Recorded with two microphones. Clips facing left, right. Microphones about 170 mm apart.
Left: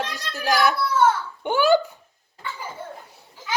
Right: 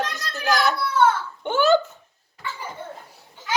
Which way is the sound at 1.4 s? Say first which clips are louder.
Even; 10° left (ahead or behind).